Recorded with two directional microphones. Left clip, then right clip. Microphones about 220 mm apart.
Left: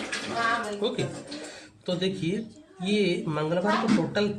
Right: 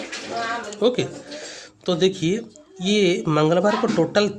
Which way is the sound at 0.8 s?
50° right (ahead or behind).